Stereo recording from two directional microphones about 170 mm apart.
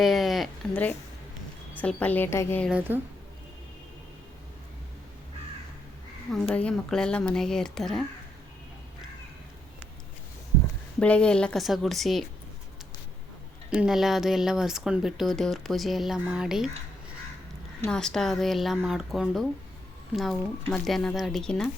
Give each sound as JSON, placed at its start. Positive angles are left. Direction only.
{"t": 0.0, "sound": "a woman's voice", "side_deg": 0}
{"t": 2.6, "sound": "a woman's voice", "side_deg": -10}
{"t": 6.5, "sound": "speech", "side_deg": 5}
{"t": 11.0, "sound": "speech", "side_deg": 5}
{"t": 13.7, "sound": "speech", "side_deg": -5}
{"t": 17.8, "sound": "speech", "side_deg": 5}